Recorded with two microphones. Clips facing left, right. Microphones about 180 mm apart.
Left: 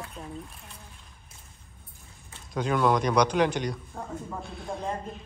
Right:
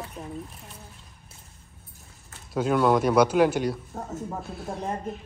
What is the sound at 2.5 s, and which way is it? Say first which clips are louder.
A man's voice: right 3 dB; 5° right (ahead or behind).